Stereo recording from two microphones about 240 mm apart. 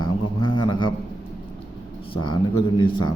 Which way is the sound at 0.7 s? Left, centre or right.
Centre.